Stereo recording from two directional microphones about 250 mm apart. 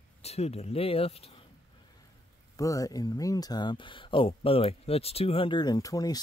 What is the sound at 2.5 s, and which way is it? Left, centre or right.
Speech, centre.